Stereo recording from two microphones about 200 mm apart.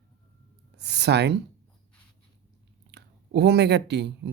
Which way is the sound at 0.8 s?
55° right (ahead or behind).